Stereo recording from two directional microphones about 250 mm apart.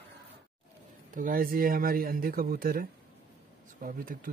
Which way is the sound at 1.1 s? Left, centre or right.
Right.